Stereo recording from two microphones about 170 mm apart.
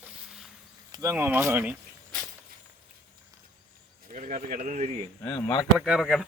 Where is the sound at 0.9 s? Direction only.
15° right (ahead or behind).